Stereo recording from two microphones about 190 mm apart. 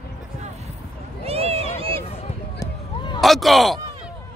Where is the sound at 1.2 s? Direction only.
30° right (ahead or behind).